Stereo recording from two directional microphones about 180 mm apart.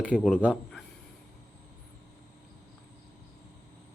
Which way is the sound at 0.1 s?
5° right (ahead or behind).